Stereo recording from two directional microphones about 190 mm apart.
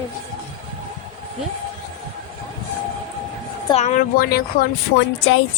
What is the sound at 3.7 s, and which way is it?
Speech, 40° left (ahead or behind).